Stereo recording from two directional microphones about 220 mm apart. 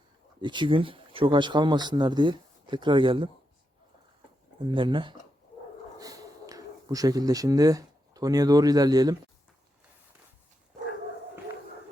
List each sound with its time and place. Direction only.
0.4 s speech: 20° right (ahead or behind)
4.6 s speech: 20° right (ahead or behind)